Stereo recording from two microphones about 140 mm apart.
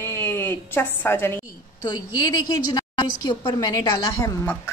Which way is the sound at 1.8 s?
30° left (ahead or behind).